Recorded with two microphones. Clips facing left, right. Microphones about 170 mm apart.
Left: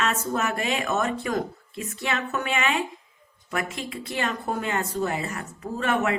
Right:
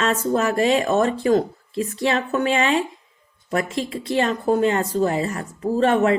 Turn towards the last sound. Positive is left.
turn(degrees=-35)  # may be behind; listen again after turning